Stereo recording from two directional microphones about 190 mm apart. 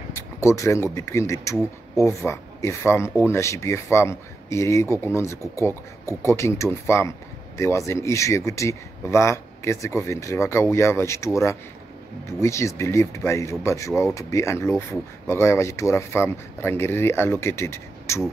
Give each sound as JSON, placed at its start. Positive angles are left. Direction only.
{"t": 0.1, "sound": "speech", "side_deg": 15}